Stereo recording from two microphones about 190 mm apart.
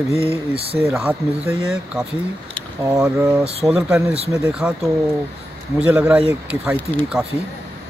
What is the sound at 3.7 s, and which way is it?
Speech, 5° right (ahead or behind).